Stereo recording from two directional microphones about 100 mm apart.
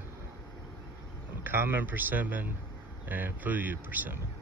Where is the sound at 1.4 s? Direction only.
20° right (ahead or behind).